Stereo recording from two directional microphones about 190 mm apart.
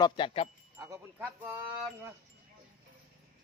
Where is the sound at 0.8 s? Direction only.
10° right (ahead or behind).